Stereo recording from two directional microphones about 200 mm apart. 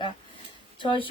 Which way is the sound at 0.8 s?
25° left (ahead or behind).